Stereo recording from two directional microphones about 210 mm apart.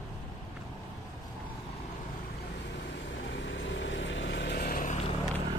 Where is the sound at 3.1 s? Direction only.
60° left (ahead or behind); by 4.9 s 40° left (ahead or behind).